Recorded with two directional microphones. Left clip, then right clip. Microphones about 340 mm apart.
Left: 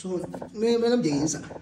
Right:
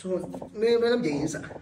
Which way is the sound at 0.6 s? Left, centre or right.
Centre.